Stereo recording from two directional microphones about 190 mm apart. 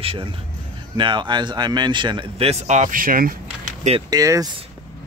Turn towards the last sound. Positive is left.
turn(degrees=-20)  # may be behind; listen again after turning